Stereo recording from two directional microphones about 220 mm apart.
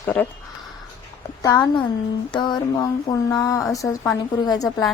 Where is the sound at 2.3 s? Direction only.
20° left (ahead or behind).